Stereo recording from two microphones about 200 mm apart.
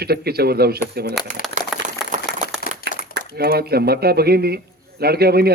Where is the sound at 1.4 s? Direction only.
45° left (ahead or behind).